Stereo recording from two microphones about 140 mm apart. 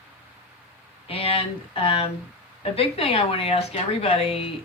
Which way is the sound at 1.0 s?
45° left (ahead or behind).